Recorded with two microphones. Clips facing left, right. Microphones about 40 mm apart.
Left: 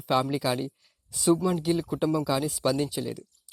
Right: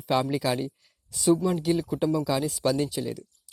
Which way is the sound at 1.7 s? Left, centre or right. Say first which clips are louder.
Right 1 dB; centre.